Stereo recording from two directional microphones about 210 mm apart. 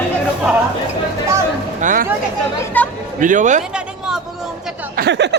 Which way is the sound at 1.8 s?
35° right (ahead or behind).